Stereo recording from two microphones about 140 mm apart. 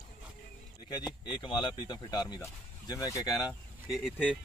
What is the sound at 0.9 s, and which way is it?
Speech, 35° left (ahead or behind).